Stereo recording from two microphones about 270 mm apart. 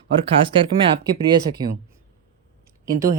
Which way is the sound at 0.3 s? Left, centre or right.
Centre.